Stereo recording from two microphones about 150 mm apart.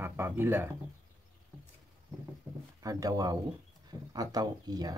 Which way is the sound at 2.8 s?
25° right (ahead or behind).